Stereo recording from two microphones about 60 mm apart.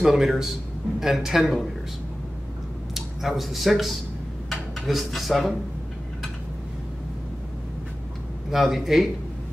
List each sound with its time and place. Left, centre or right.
0.0 s speech: centre
2.9 s speech: centre
8.5 s speech: centre